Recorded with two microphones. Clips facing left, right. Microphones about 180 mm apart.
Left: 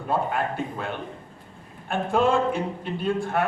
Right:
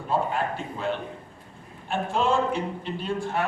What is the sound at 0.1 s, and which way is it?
Speech, 55° left (ahead or behind).